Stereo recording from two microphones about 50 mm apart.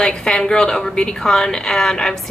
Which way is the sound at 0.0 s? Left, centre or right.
Centre.